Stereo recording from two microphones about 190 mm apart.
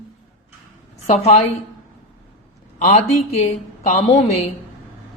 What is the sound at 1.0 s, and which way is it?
Speech, 35° left (ahead or behind).